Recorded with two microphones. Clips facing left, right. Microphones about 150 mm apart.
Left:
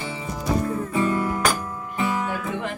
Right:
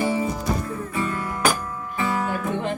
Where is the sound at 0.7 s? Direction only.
20° left (ahead or behind).